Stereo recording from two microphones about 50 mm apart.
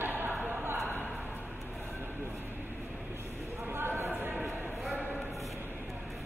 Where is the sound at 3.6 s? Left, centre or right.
Right.